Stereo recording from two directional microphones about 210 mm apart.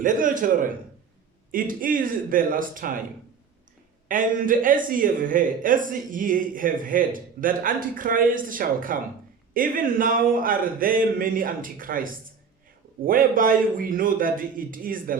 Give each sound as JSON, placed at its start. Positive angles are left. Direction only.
{"t": 0.0, "sound": "speech", "side_deg": -40}
{"t": 4.1, "sound": "speech", "side_deg": -40}